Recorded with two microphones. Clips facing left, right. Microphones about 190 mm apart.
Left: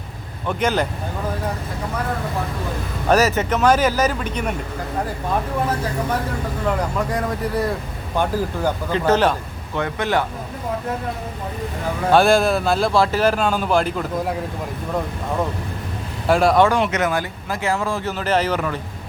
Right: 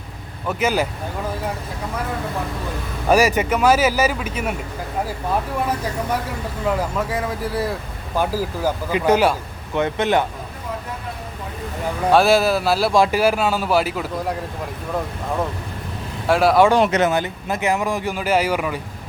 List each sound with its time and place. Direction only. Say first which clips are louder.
0.4 s speech: even; 5° right (ahead or behind)
3.1 s speech: right 1 dB; 10° right (ahead or behind)
6.7 s speech: right 1 dB; 5° right (ahead or behind); by 10.2 s 20° right (ahead or behind)
12.1 s speech: even; 5° right (ahead or behind)
16.2 s speech: even; centre (ahead or behind)
16.8 s speech: right 3 dB; 30° right (ahead or behind); by 18.8 s 10° right (ahead or behind)